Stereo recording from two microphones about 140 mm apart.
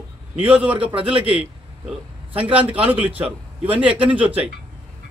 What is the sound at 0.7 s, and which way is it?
Speech, 40° right (ahead or behind).